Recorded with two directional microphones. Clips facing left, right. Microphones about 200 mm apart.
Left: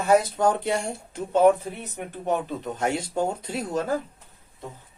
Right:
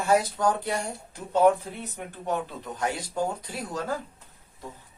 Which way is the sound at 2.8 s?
25° left (ahead or behind).